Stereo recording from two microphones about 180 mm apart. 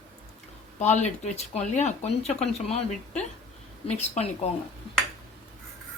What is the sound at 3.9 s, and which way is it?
Speech, 40° left (ahead or behind).